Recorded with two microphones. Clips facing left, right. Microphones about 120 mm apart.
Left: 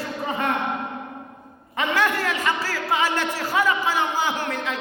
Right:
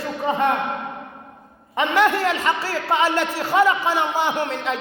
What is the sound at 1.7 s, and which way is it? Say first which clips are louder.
A man's voice: right 4 dB; 25° right (ahead or behind).